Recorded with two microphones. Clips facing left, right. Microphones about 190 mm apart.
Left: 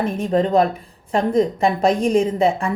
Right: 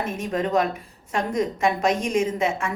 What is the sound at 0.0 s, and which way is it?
A woman's voice, 35° left (ahead or behind).